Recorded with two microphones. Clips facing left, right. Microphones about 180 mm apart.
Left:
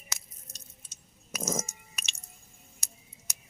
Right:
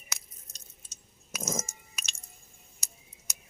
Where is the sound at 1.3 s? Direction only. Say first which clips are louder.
Left 2 dB; centre (ahead or behind).